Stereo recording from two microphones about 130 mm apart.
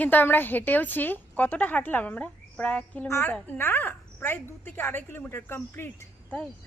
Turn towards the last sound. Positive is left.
turn(degrees=10)  # may be behind; listen again after turning